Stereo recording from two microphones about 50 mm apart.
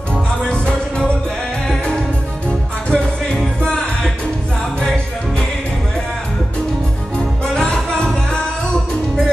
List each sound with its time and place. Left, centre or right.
0.1 s music: centre
2.9 s music: centre
7.5 s music: centre